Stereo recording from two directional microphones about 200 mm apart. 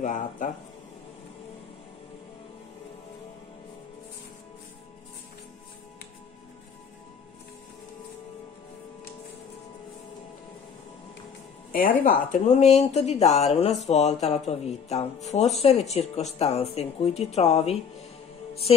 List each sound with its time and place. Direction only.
0.0 s speech: 40° left (ahead or behind)
11.7 s speech: 45° left (ahead or behind)
12.3 s speech: 35° left (ahead or behind)
18.5 s music: 30° left (ahead or behind)